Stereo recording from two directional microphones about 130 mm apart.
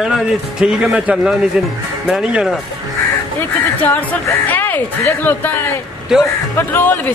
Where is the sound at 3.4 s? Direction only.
15° left (ahead or behind).